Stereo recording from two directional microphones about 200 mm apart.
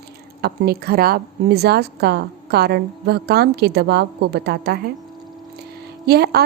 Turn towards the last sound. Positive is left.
turn(degrees=-55)  # may be behind; listen again after turning